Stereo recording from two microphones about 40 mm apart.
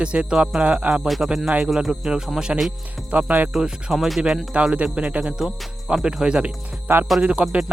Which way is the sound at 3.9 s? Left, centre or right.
Centre.